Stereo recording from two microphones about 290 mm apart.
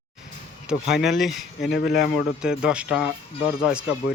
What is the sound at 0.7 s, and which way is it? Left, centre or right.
Speech, centre.